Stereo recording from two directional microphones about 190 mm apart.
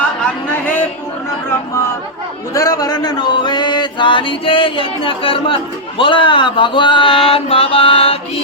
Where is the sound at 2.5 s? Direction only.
20° left (ahead or behind).